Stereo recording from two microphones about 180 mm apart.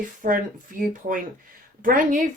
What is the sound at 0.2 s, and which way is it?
Speech, 50° right (ahead or behind).